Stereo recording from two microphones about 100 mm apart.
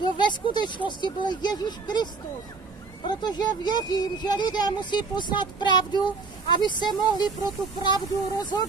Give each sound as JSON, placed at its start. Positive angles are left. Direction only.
{"t": 0.2, "sound": "speech", "side_deg": 50}
{"t": 3.1, "sound": "speech", "side_deg": 45}